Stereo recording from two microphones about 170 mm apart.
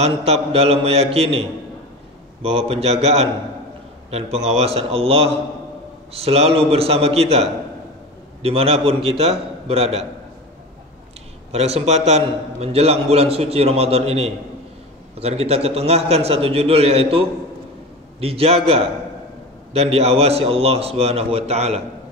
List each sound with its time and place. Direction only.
0.0 s a man's voice: 35° right (ahead or behind)
11.5 s a man's voice: 40° right (ahead or behind)